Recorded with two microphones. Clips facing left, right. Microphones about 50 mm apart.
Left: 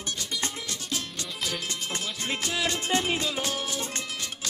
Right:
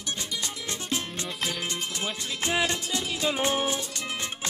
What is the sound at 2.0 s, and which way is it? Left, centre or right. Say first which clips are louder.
Music: right 2 dB; right.